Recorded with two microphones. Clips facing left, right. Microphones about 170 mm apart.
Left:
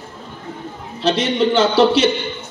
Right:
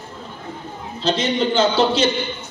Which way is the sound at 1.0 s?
75° left (ahead or behind).